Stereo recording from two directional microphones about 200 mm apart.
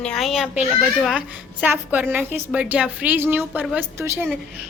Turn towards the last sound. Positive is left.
turn(degrees=-10)  # may be behind; listen again after turning